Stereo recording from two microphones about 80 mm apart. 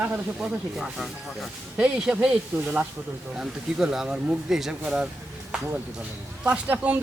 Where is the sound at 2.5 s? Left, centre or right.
Right.